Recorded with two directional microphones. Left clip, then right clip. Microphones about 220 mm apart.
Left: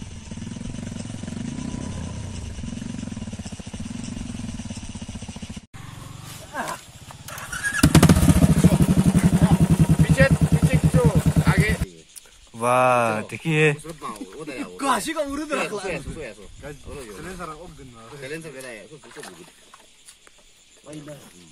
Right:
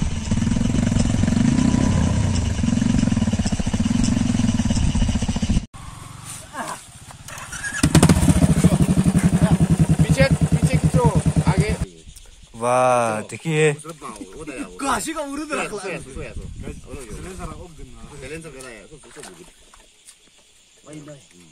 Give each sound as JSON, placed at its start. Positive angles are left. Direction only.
{"t": 0.0, "sound": "vehicle", "side_deg": 0}
{"t": 6.5, "sound": "wild animals", "side_deg": 25}
{"t": 7.2, "sound": "vehicle", "side_deg": 0}
{"t": 8.6, "sound": "vehicle", "side_deg": 5}
{"t": 11.4, "sound": "a sound", "side_deg": -35}
{"t": 12.5, "sound": "speech", "side_deg": 0}
{"t": 18.2, "sound": "speech", "side_deg": 0}